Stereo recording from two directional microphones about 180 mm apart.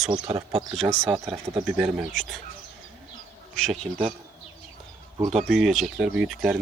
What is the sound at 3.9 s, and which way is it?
Speech, 10° right (ahead or behind).